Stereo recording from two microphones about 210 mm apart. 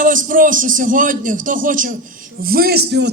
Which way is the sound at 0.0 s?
40° right (ahead or behind).